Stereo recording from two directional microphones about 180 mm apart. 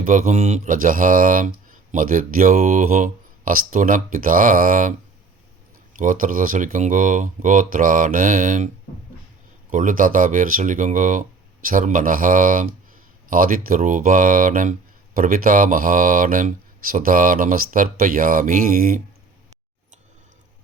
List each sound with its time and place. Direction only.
0.0 s speech: 45° right (ahead or behind)